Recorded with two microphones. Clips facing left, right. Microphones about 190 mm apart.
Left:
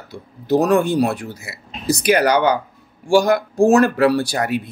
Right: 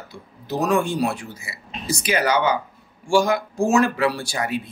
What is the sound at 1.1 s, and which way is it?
Speech, 60° left (ahead or behind).